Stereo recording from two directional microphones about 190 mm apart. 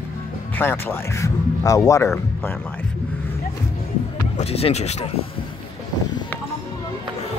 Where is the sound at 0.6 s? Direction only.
10° left (ahead or behind).